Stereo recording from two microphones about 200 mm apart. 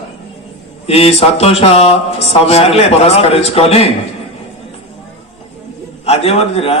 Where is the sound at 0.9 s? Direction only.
30° left (ahead or behind).